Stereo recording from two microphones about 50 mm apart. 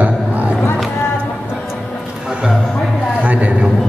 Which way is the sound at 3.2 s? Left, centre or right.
Right.